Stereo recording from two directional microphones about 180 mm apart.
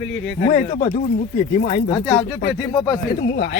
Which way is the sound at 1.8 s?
20° left (ahead or behind).